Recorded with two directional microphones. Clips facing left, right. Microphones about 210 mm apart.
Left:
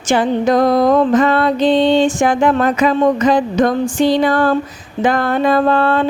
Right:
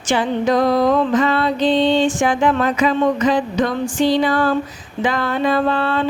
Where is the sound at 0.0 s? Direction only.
45° left (ahead or behind).